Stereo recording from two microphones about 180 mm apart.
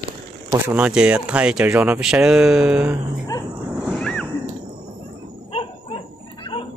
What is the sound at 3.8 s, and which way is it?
Wild animals, centre (ahead or behind).